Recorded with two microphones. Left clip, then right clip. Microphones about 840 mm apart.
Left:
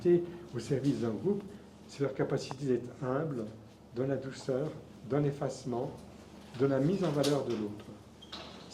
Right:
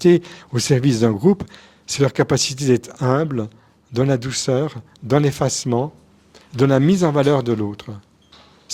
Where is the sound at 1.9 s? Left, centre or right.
Right.